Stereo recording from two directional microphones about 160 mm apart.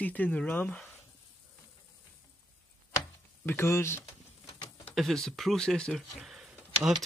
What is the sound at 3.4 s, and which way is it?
Speech, 15° left (ahead or behind).